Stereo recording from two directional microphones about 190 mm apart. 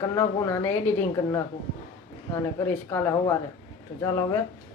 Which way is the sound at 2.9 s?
15° left (ahead or behind).